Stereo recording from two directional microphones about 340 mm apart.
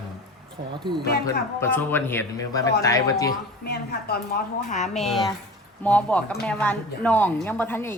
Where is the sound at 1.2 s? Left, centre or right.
Centre.